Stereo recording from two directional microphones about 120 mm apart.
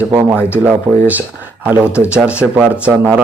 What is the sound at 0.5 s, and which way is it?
Speech, 15° right (ahead or behind).